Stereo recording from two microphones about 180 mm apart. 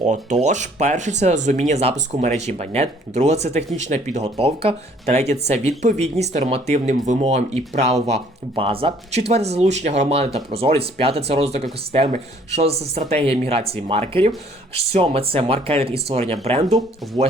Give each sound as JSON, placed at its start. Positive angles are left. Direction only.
{"t": 0.0, "sound": "speech", "side_deg": -40}